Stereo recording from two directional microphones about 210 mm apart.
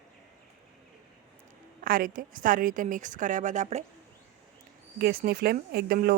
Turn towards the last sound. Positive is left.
turn(degrees=-45)  # may be behind; listen again after turning